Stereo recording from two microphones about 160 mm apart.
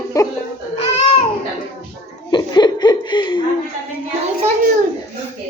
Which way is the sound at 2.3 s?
25° left (ahead or behind).